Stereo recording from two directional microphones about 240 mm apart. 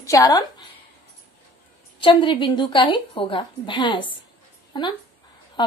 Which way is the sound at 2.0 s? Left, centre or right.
Centre.